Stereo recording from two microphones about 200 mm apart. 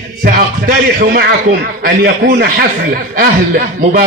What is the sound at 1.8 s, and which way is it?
Speech, 55° right (ahead or behind).